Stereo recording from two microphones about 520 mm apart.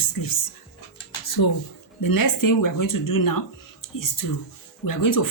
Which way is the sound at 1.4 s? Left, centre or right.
Left.